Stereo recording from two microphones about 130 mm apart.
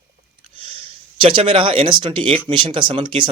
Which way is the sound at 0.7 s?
40° right (ahead or behind).